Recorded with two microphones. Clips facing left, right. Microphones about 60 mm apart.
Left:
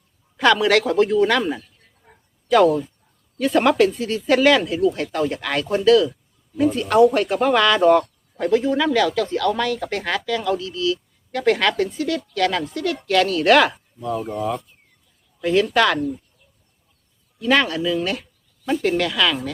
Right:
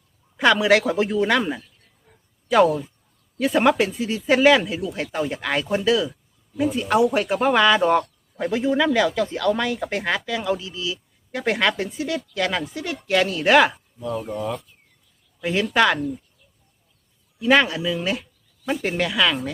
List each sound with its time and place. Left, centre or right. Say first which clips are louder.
0.3 s speech: left 1 dB; centre
2.1 s a sound: left 5 dB; left
3.3 s speech: left 2 dB; centre
14.0 s speech: left 2 dB; left
15.4 s speech: left 2 dB; centre
17.4 s speech: right 1 dB; centre